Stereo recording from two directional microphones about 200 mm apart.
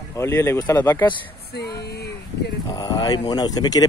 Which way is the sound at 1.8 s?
55° left (ahead or behind).